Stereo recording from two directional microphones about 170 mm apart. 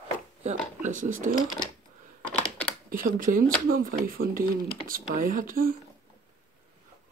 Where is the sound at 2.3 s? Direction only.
10° left (ahead or behind).